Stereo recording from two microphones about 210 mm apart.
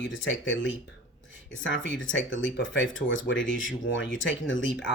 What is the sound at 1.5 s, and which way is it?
Speech, 65° left (ahead or behind).